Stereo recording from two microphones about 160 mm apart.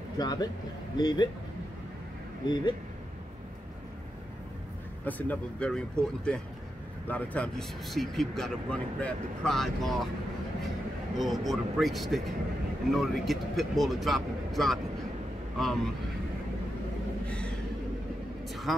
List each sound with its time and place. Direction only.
0.2 s speech: 25° left (ahead or behind)
2.4 s speech: 25° left (ahead or behind)
5.0 s speech: 10° left (ahead or behind)
11.1 s speech: centre (ahead or behind)
18.5 s vehicle: centre (ahead or behind)